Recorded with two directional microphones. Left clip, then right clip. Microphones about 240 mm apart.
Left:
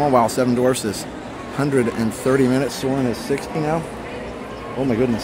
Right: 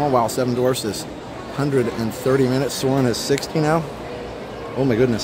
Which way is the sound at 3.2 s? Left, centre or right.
Centre.